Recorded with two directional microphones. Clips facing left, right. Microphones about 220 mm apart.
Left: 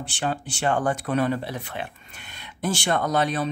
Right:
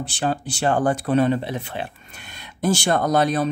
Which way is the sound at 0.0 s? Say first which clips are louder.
Right 4 dB; 40° right (ahead or behind).